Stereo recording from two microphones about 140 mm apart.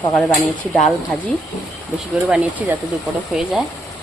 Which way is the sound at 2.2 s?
10° right (ahead or behind).